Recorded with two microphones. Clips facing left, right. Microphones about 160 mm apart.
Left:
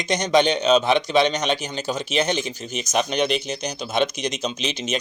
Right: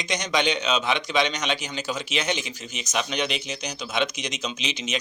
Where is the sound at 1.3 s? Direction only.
55° left (ahead or behind).